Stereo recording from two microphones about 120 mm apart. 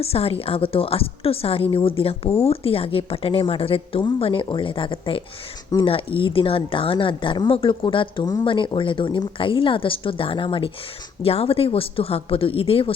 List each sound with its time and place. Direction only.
0.0 s a woman's voice: 55° left (ahead or behind)